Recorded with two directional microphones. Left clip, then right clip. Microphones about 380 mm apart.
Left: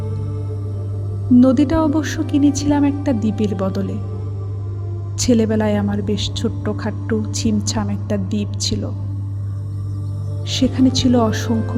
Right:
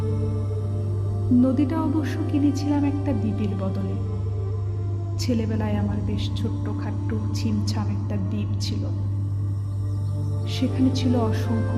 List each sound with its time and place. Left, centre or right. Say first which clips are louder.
1.4 s speech: left 8 dB; centre
5.1 s speech: left 11 dB; centre
10.5 s speech: left 8 dB; centre